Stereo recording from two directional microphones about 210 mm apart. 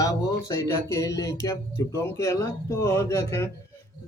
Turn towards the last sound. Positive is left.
turn(degrees=15)  # may be behind; listen again after turning